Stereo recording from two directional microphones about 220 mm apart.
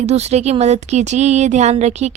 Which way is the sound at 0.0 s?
30° right (ahead or behind).